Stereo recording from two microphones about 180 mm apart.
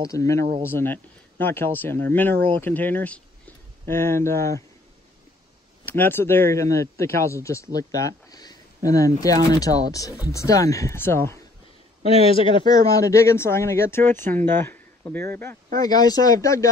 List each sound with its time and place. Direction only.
0.1 s speech: 15° left (ahead or behind)
5.9 s speech: 10° left (ahead or behind)
12.0 s speech: 35° left (ahead or behind); by 16.6 s 20° left (ahead or behind)